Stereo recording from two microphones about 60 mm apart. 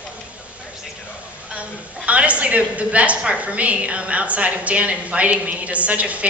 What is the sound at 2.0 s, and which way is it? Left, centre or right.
A woman's voice, right.